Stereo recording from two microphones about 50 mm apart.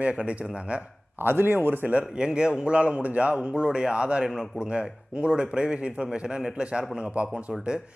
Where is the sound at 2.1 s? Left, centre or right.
Centre.